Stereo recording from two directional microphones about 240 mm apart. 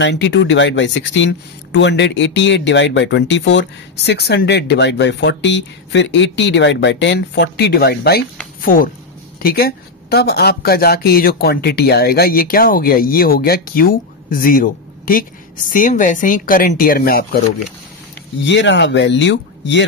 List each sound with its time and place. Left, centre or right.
0.0 s speech: left
18.5 s speech: left